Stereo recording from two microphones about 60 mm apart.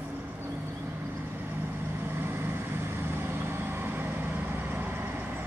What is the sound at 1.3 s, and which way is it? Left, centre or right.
Vehicle, right.